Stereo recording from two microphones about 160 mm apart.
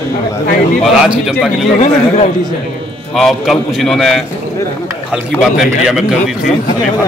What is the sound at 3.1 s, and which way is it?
A man's voice, centre (ahead or behind).